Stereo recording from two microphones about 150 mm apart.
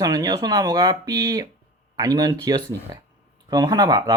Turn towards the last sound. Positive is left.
turn(degrees=-25)  # may be behind; listen again after turning